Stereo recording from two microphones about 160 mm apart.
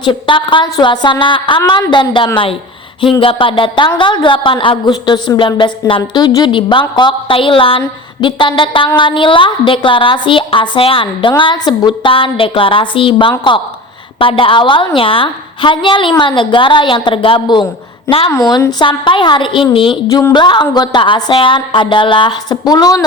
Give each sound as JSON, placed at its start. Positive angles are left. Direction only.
{"t": 0.0, "sound": "a woman's voice", "side_deg": 30}